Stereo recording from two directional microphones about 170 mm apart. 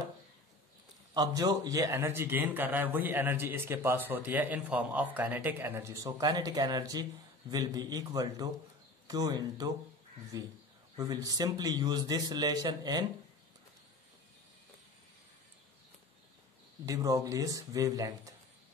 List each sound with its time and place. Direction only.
1.1 s a man's voice: 20° right (ahead or behind)
16.8 s a man's voice: 20° right (ahead or behind)